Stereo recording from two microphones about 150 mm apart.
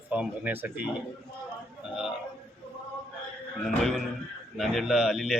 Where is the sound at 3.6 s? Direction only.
Centre (ahead or behind).